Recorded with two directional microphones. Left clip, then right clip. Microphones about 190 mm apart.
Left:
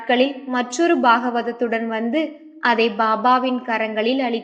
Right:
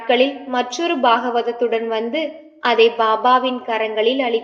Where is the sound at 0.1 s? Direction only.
35° left (ahead or behind).